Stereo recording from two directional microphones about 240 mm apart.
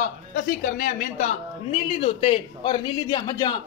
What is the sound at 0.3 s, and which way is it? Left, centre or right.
A man's voice, left.